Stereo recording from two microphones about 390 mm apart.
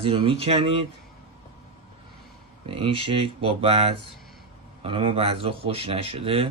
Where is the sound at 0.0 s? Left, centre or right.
Centre.